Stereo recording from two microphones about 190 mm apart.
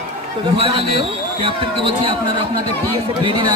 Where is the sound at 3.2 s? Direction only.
25° right (ahead or behind).